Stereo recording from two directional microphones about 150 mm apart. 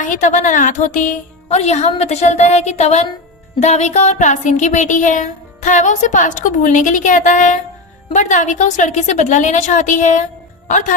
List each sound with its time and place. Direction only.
0.0 s a woman's voice: 60° left (ahead or behind)
3.6 s music: 50° left (ahead or behind)
8.1 s a woman's voice: 55° left (ahead or behind)
10.7 s music: 60° left (ahead or behind)